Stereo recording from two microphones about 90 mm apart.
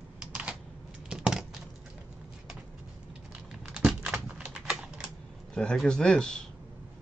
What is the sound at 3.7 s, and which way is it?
Typing, 5° right (ahead or behind).